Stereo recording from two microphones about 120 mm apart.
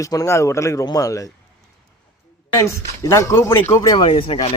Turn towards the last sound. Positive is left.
turn(degrees=50)  # may be behind; listen again after turning